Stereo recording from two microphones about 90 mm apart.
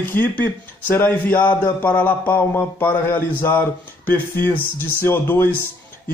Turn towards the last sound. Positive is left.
turn(degrees=25)  # may be behind; listen again after turning